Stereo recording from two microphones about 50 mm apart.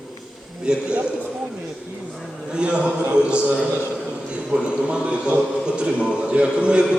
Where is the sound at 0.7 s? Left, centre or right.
Centre.